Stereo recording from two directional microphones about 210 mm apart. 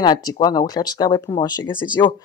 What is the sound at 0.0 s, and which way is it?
Speech, 20° left (ahead or behind).